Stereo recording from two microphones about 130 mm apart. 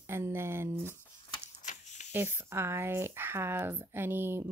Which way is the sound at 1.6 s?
70° left (ahead or behind).